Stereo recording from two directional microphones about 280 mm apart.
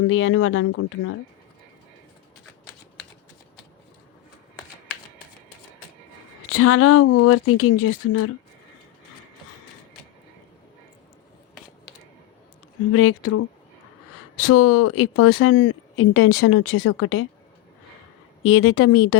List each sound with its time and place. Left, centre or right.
0.1 s speech: left
6.5 s speech: left
12.9 s speech: left
14.4 s speech: left
18.4 s speech: left